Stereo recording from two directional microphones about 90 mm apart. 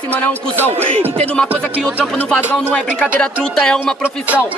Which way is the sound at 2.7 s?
10° left (ahead or behind).